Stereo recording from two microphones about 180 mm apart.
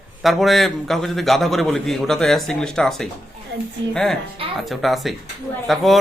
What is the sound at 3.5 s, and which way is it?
Speech, 75° right (ahead or behind).